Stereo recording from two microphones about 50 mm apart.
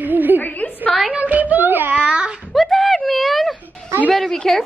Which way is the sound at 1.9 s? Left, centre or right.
Right.